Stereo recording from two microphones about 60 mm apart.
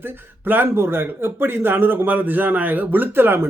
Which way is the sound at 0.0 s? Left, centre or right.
Right.